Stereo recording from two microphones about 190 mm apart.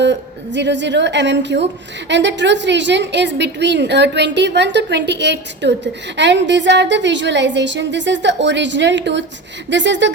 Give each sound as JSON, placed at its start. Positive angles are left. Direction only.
{"t": 0.0, "sound": "a woman's voice", "side_deg": -70}